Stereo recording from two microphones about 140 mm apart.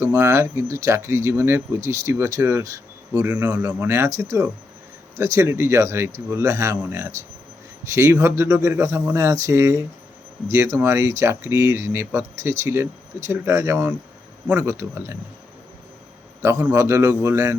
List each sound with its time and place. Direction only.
0.0 s speech: 20° right (ahead or behind)
16.4 s speech: 15° right (ahead or behind)